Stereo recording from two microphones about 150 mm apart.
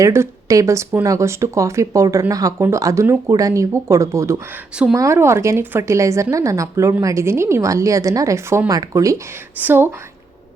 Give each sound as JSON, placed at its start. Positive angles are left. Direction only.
{"t": 0.0, "sound": "speech", "side_deg": -20}